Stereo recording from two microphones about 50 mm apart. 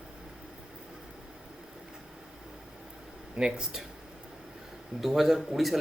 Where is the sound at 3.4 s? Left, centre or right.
Centre.